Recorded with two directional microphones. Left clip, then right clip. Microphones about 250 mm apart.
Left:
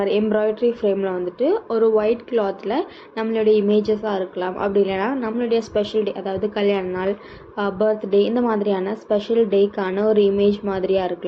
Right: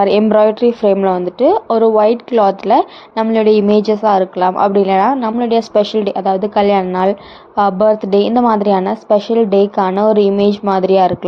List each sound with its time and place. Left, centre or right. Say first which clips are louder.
0.0 s speech: right 9 dB; right